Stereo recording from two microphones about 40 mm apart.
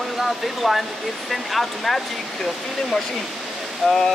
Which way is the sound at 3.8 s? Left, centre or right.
Centre.